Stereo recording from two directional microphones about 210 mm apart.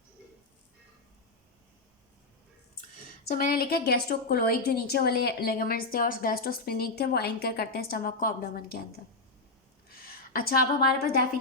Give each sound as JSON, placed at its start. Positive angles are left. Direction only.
{"t": 3.3, "sound": "a woman's voice", "side_deg": 45}
{"t": 9.9, "sound": "a woman's voice", "side_deg": 45}